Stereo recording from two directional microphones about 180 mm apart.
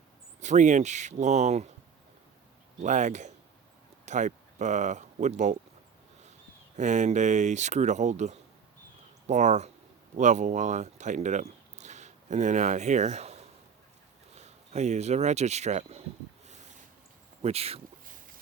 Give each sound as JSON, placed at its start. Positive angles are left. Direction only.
{"t": 0.3, "sound": "speech", "side_deg": -40}
{"t": 2.8, "sound": "speech", "side_deg": -45}
{"t": 6.7, "sound": "speech", "side_deg": -40}
{"t": 17.4, "sound": "speech", "side_deg": -35}